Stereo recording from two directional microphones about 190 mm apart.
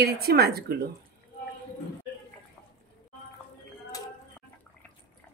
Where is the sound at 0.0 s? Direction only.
55° right (ahead or behind).